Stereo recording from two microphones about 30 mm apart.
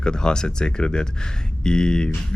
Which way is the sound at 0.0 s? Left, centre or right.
Left.